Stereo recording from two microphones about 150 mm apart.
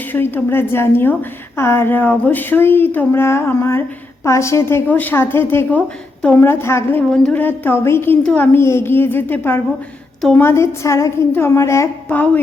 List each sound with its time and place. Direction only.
0.1 s speech: 10° left (ahead or behind)
7.1 s a woman's voice: 5° left (ahead or behind)
10.4 s speech: 20° left (ahead or behind)